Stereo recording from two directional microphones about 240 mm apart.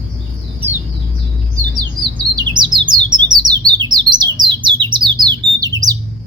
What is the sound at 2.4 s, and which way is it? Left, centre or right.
Bird, centre.